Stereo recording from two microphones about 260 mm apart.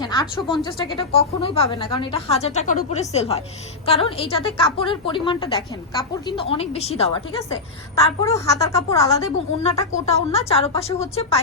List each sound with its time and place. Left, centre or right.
0.0 s speech: centre
7.9 s speech: centre
9.6 s speech: left